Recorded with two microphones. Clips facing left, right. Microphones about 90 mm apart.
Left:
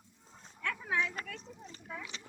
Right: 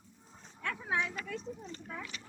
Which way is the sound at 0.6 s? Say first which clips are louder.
Even; 25° right (ahead or behind).